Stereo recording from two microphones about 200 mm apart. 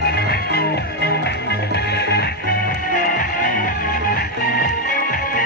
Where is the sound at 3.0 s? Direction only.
45° left (ahead or behind).